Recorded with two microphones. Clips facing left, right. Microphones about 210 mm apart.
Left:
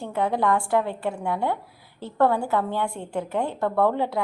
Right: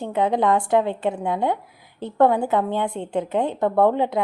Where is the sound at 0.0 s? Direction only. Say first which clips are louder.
Right 3 dB; 20° right (ahead or behind).